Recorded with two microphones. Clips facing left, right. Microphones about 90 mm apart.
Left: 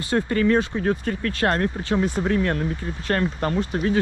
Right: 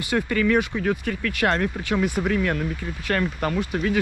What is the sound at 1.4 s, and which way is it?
Speech, 5° left (ahead or behind).